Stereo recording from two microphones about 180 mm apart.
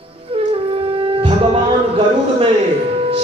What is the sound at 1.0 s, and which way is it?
Music, 30° right (ahead or behind).